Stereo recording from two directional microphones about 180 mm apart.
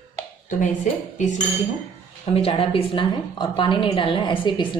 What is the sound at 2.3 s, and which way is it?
A woman's voice, 35° left (ahead or behind).